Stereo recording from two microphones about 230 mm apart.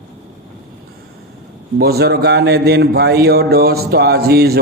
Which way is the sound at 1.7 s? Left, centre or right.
Right.